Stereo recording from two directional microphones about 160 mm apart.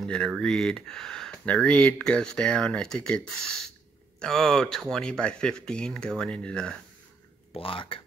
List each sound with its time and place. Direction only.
0.0 s speech: 5° left (ahead or behind)
4.2 s speech: 5° left (ahead or behind)
7.5 s speech: 35° left (ahead or behind)